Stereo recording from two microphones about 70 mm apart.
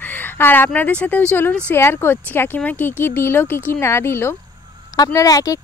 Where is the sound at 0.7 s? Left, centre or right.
Left.